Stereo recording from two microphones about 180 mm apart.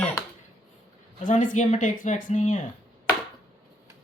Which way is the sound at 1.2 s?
45° left (ahead or behind).